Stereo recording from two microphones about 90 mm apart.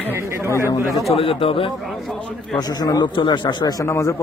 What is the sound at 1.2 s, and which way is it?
Speech, 90° left.